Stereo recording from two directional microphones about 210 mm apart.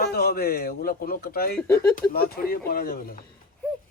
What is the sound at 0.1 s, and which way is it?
A man's voice, 45° left (ahead or behind).